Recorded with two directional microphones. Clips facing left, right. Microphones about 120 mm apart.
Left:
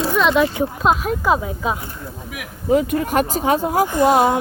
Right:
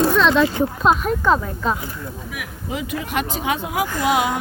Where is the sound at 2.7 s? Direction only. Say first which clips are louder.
Left 8 dB; 45° left (ahead or behind).